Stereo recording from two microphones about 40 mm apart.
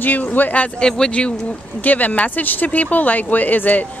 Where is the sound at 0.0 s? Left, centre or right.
Left.